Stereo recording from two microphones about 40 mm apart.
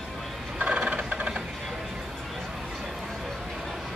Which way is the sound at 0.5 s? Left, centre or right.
Right.